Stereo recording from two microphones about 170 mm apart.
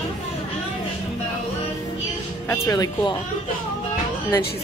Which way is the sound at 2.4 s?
20° left (ahead or behind).